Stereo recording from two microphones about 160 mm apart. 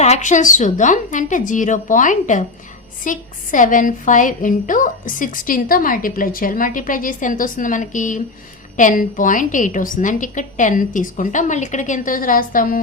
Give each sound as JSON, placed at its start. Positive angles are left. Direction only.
{"t": 0.0, "sound": "a woman's voice", "side_deg": 45}